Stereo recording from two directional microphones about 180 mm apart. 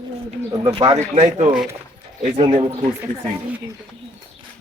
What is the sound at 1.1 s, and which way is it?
Speech, 35° right (ahead or behind).